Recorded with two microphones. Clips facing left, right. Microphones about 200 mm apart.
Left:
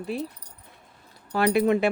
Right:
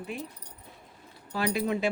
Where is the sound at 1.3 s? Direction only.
65° left (ahead or behind).